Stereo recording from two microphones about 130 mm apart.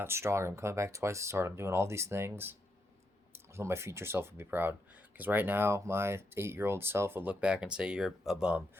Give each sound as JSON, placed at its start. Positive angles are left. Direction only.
{"t": 0.0, "sound": "speech", "side_deg": -20}